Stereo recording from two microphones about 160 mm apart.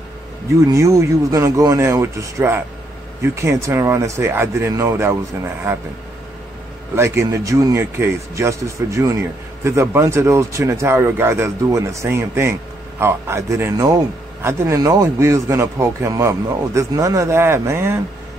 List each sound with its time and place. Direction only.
0.7 s a man's voice: 20° right (ahead or behind)
7.0 s a man's voice: 20° right (ahead or behind)